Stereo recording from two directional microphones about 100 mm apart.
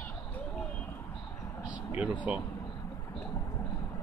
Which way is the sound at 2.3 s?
15° right (ahead or behind).